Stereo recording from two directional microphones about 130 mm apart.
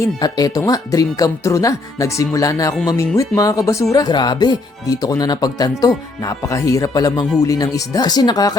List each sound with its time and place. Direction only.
0.0 s speech: 30° left (ahead or behind)